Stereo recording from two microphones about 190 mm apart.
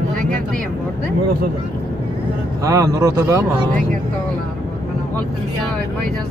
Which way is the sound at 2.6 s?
15° right (ahead or behind).